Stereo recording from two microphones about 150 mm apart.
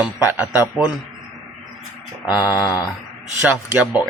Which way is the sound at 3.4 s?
10° right (ahead or behind).